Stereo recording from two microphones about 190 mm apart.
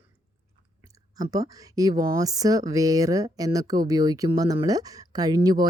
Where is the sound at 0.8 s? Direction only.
20° right (ahead or behind).